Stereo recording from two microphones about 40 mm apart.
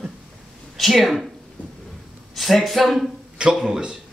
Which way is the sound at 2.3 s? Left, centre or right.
Centre.